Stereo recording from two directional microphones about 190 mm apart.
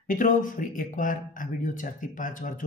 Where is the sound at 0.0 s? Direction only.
45° left (ahead or behind).